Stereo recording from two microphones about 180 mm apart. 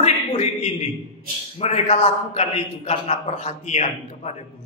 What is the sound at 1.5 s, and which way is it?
A man's voice, 35° left (ahead or behind).